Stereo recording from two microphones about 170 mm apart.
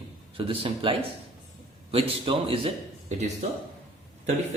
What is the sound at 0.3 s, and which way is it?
A man's voice, 30° right (ahead or behind).